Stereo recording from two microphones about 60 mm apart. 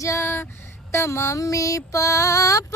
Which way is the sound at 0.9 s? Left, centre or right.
Left.